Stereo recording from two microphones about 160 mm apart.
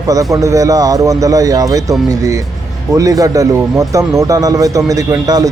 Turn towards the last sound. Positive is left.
turn(degrees=-25)  # may be behind; listen again after turning